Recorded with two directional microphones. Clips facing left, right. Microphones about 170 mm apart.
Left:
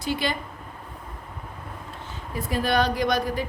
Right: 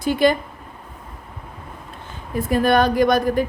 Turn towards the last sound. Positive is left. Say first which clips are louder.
# right 7 dB
turn(degrees=-50)  # may be behind; listen again after turning